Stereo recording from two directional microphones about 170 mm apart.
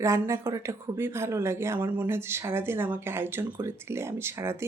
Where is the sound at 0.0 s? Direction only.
15° right (ahead or behind).